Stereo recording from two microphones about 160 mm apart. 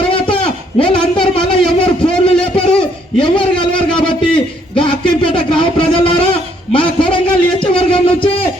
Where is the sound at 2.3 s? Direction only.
5° left (ahead or behind).